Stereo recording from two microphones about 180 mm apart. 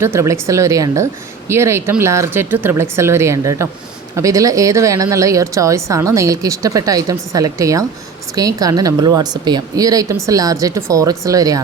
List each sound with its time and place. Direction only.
0.0 s speech: 15° right (ahead or behind)